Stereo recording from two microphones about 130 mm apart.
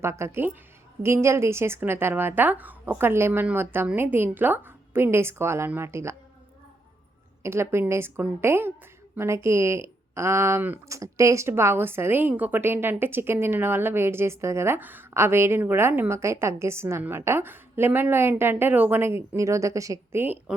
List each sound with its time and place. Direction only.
0.0 s speech: 20° right (ahead or behind)
7.4 s speech: 20° right (ahead or behind)
20.2 s speech: 15° right (ahead or behind)